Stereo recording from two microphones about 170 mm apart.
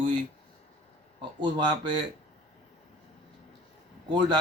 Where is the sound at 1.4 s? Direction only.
25° right (ahead or behind).